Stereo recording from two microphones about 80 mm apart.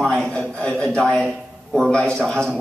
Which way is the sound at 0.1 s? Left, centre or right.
Centre.